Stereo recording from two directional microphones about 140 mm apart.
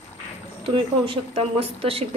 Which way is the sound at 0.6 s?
40° right (ahead or behind).